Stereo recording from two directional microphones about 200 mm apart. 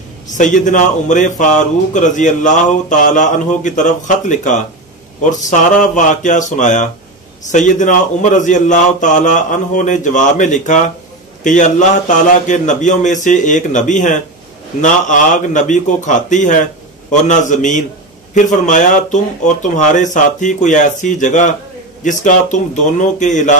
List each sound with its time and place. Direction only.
0.4 s a man's voice: 40° left (ahead or behind)